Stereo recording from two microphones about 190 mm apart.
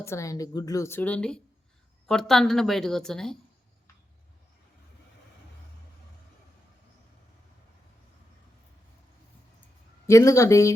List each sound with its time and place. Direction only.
0.0 s a woman's voice: 15° left (ahead or behind)
10.1 s a woman's voice: 15° left (ahead or behind)